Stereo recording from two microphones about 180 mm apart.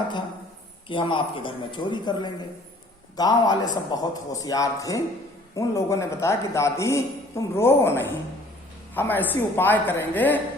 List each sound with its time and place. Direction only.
0.9 s a man's voice: 30° left (ahead or behind); by 10.4 s 10° left (ahead or behind)